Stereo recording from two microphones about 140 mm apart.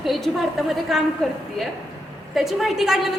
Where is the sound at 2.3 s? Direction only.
Centre (ahead or behind).